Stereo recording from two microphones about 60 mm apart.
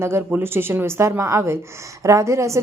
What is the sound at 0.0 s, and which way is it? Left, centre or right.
A woman's voice, right.